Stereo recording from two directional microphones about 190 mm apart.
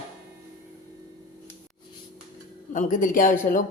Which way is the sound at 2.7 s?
40° left (ahead or behind).